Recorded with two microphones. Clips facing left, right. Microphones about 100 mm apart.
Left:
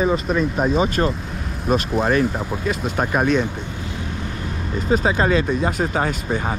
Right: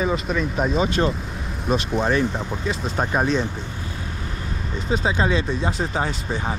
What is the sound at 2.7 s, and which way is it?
Speech, 60° left (ahead or behind).